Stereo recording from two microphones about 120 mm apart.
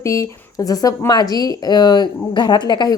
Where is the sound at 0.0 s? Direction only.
25° left (ahead or behind).